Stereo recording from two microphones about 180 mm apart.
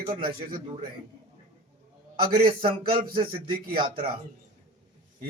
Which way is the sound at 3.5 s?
30° right (ahead or behind).